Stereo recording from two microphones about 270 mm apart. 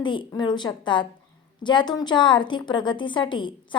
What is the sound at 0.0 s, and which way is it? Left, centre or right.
A woman's voice, centre.